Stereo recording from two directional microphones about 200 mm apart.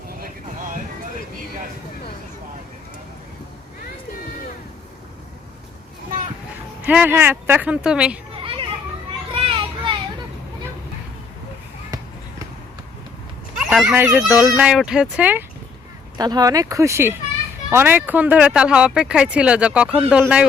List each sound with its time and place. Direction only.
0.2 s vehicle: 45° right (ahead or behind)
6.8 s speech: 10° right (ahead or behind)
8.4 s children playing: 25° right (ahead or behind)
9.3 s a sound: 25° right (ahead or behind)
11.9 s basketball bounce: 15° right (ahead or behind)
13.6 s dog: centre (ahead or behind)
13.8 s speech: 10° right (ahead or behind)
16.1 s speech: 20° right (ahead or behind)